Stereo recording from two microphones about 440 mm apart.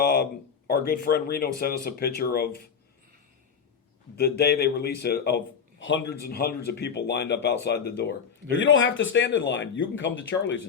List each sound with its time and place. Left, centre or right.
0.0 s a sound: left
0.7 s speech: left
4.2 s speech: left